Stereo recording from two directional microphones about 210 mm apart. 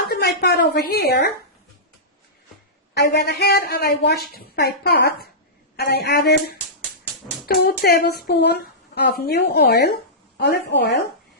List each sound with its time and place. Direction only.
0.0 s a sound: 50° left (ahead or behind)
0.4 s a woman's voice: 55° left (ahead or behind)
2.9 s a woman's voice: 50° left (ahead or behind)